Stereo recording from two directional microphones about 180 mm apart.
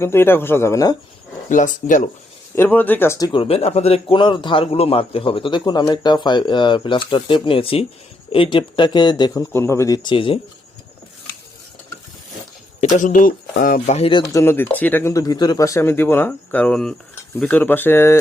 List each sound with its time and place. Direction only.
0.0 s speech: 15° left (ahead or behind)
1.5 s speech: 45° left (ahead or behind)
2.6 s speech: 10° left (ahead or behind)
3.4 s a man's voice: 35° left (ahead or behind)
12.8 s speech: 45° left (ahead or behind); by 18.2 s 15° left (ahead or behind)